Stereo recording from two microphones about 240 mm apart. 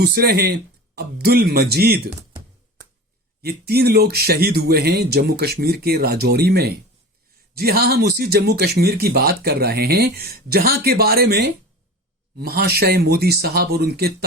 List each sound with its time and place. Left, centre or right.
0.0 s speech: right
3.4 s speech: right